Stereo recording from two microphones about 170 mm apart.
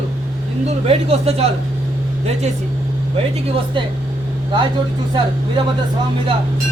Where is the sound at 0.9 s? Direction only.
35° right (ahead or behind).